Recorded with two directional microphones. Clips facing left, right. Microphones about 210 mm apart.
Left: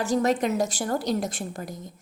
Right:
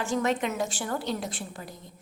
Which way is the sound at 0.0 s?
40° left (ahead or behind).